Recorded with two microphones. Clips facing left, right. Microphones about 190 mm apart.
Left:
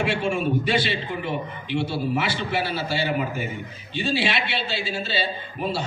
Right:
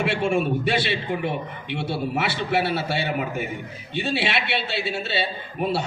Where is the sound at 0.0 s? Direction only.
60° right (ahead or behind).